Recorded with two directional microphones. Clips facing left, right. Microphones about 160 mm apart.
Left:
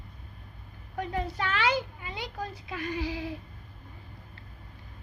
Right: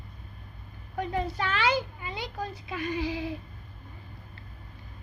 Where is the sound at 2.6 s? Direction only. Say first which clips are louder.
Right 2 dB; 20° right (ahead or behind).